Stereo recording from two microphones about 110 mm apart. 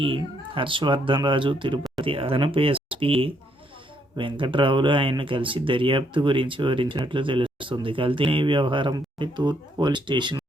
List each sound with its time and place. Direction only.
0.0 s speech: 55° right (ahead or behind)